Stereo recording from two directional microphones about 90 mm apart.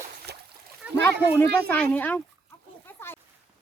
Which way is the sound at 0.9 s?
30° left (ahead or behind).